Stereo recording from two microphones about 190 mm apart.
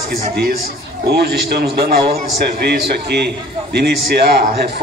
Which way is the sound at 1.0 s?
60° right (ahead or behind).